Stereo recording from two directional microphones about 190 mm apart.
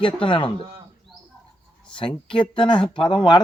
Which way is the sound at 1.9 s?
25° left (ahead or behind).